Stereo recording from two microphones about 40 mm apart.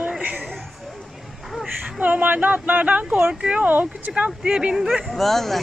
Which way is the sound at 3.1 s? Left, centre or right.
Right.